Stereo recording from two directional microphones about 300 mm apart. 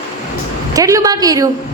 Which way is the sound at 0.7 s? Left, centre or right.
Centre.